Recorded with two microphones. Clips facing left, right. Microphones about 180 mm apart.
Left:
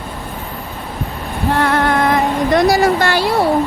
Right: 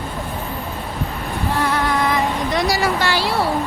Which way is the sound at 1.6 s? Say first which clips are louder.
Left 5 dB; 60° left (ahead or behind).